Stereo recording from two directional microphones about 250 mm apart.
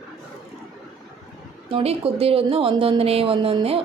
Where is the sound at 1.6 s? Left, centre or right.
Right.